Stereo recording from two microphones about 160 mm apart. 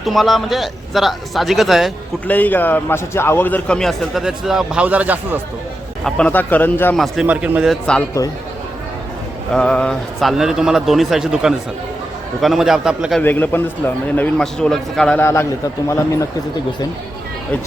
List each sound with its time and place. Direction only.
0.0 s a man's voice: centre (ahead or behind)
2.2 s a man's voice: 10° left (ahead or behind); by 5.4 s 10° right (ahead or behind)
6.1 s a man's voice: 5° left (ahead or behind)
6.9 s a man's voice: centre (ahead or behind)
9.5 s a man's voice: 5° left (ahead or behind)
13.1 s a man's voice: 10° left (ahead or behind)
15.2 s a man's voice: 15° left (ahead or behind)